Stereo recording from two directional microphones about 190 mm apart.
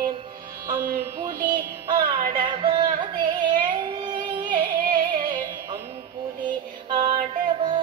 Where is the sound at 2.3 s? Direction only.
25° right (ahead or behind).